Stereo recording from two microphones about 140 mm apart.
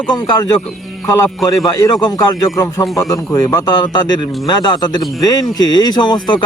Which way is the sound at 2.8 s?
Centre (ahead or behind).